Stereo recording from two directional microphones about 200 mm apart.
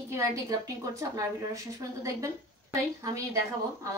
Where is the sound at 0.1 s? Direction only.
15° right (ahead or behind).